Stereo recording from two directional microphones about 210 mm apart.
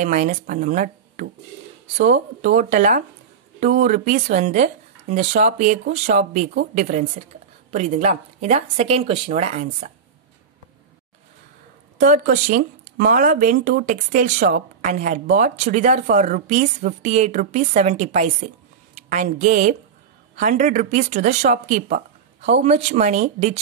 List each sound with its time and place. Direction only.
0.0 s speech: 35° right (ahead or behind)
12.0 s speech: 35° right (ahead or behind)